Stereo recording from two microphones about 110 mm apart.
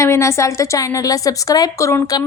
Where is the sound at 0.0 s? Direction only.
25° left (ahead or behind).